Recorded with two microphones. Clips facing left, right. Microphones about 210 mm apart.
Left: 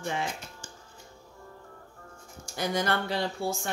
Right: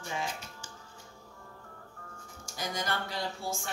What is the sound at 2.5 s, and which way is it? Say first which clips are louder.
Speech: left 7 dB; 65° left (ahead or behind).